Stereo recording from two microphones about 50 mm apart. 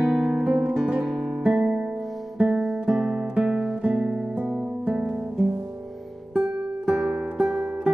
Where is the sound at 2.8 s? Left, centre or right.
Centre.